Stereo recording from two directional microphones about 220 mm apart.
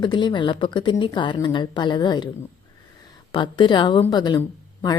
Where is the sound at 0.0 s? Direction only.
20° left (ahead or behind).